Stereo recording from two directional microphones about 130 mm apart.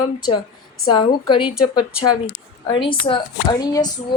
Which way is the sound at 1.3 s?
40° left (ahead or behind).